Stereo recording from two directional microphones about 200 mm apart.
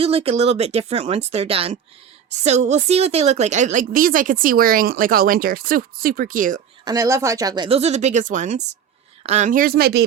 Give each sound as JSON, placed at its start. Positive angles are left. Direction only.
{"t": 0.0, "sound": "a woman's voice", "side_deg": -30}
{"t": 6.8, "sound": "a woman's voice", "side_deg": -20}